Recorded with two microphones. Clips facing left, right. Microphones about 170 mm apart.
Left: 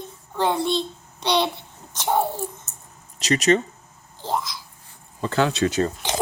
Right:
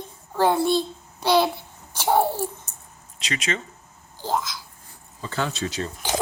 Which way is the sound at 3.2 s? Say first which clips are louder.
Left 10 dB; 40° left (ahead or behind).